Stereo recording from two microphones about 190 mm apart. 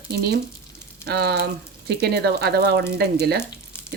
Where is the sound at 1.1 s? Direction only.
55° right (ahead or behind).